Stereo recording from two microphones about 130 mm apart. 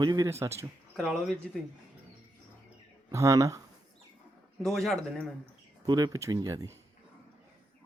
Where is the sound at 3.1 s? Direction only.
25° right (ahead or behind).